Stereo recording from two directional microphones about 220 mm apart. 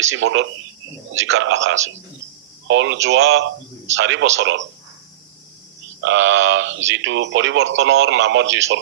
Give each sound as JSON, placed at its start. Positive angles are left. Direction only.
{"t": 0.0, "sound": "speech", "side_deg": -60}
{"t": 6.0, "sound": "speech", "side_deg": -60}